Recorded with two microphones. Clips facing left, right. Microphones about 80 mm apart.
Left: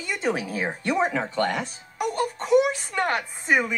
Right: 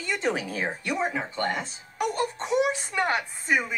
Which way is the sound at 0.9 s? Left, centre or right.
Left.